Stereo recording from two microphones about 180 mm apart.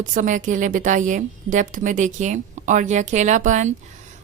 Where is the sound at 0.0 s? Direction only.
45° right (ahead or behind).